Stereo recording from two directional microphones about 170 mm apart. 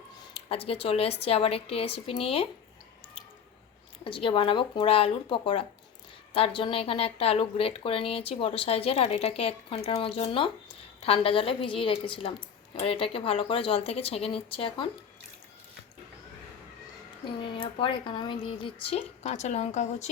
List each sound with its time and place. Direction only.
0.3 s a woman's voice: 35° left (ahead or behind)
4.0 s a woman's voice: 30° left (ahead or behind)
17.4 s a woman's voice: 30° left (ahead or behind)